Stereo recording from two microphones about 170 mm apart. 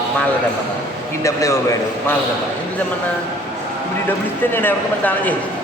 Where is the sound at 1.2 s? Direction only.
20° left (ahead or behind).